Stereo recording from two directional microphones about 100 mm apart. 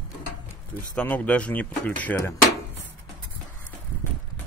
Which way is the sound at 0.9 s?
15° left (ahead or behind).